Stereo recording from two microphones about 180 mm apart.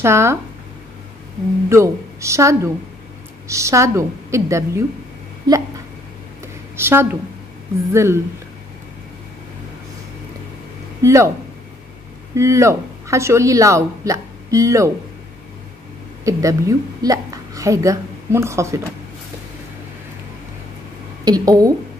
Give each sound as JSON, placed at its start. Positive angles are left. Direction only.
{"t": 0.0, "sound": "a woman's voice", "side_deg": -15}
{"t": 1.7, "sound": "a woman's voice", "side_deg": -15}
{"t": 6.4, "sound": "a sound", "side_deg": -15}
{"t": 7.9, "sound": "a woman's voice", "side_deg": -15}
{"t": 11.0, "sound": "speech", "side_deg": -15}
{"t": 12.4, "sound": "speech", "side_deg": -15}
{"t": 16.3, "sound": "a woman's voice", "side_deg": -20}
{"t": 21.2, "sound": "speech", "side_deg": -20}